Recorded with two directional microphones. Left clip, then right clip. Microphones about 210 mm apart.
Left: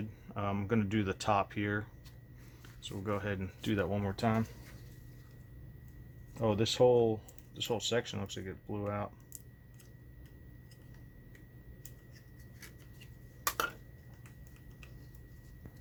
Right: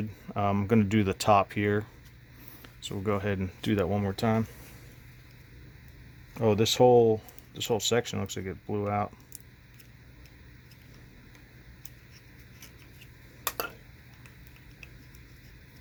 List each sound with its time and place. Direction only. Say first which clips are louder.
0.3 s speech: right 8 dB; 50° right (ahead or behind)
6.4 s speech: right 6 dB; 50° right (ahead or behind)